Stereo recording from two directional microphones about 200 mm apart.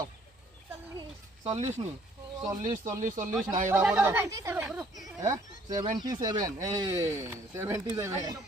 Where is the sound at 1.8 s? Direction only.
25° right (ahead or behind).